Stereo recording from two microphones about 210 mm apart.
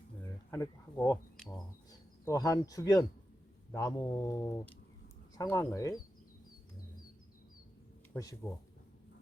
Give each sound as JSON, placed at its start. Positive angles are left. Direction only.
{"t": 0.5, "sound": "a sound", "side_deg": 15}
{"t": 2.2, "sound": "speech", "side_deg": 15}
{"t": 8.1, "sound": "speech", "side_deg": 15}